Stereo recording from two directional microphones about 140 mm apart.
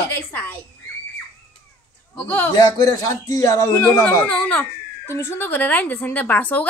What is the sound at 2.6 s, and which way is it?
A man's voice, 25° left (ahead or behind).